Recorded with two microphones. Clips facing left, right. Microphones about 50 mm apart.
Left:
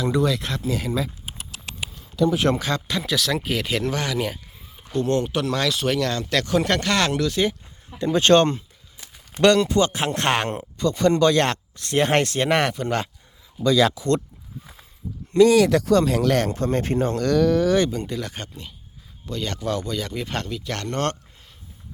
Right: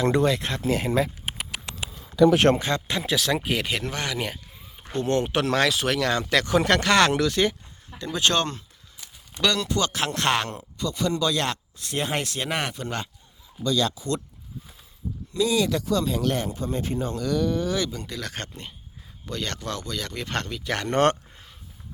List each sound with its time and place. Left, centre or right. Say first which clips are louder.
0.0 s speech: even; right
2.6 s speech: left 1 dB; right
3.0 s speech: left 1 dB; centre
7.9 s speech: left 8 dB; left
15.3 s speech: left 8 dB; left
17.7 s speech: left 7 dB; left
18.1 s speech: left 3 dB; centre
20.7 s speech: right 5 dB; centre